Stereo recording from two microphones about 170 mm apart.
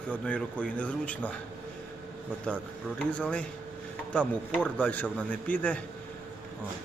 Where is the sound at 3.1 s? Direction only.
5° left (ahead or behind).